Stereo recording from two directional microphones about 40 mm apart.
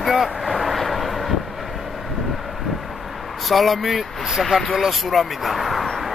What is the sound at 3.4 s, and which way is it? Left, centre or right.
Speech, centre.